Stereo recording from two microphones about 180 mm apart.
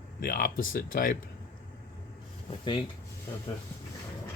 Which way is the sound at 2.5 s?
25° left (ahead or behind).